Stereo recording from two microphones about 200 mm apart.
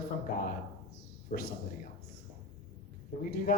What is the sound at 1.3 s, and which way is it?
Speech, 50° left (ahead or behind).